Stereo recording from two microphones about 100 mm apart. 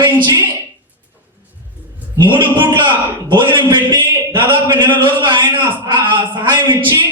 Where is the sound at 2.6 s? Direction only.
50° right (ahead or behind).